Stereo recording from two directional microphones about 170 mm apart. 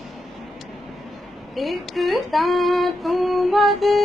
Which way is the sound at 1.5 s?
Centre (ahead or behind).